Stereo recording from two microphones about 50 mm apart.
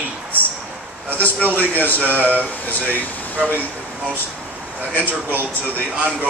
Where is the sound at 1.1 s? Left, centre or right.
Left.